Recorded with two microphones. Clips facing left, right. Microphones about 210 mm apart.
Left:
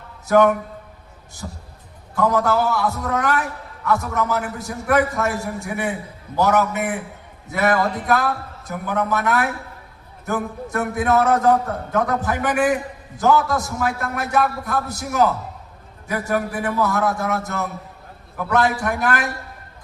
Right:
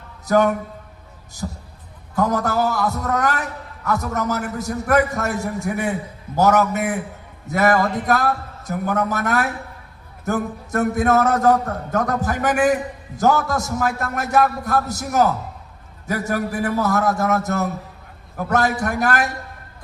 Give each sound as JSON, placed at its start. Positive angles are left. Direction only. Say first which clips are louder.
{"t": 0.3, "sound": "a man's voice", "louder": "left 2 dB", "side_deg": -40}